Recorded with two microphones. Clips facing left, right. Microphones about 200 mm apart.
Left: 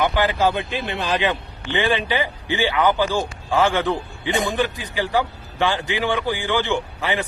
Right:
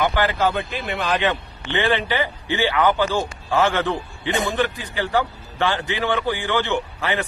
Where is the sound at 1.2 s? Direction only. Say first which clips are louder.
Even; 15° left (ahead or behind).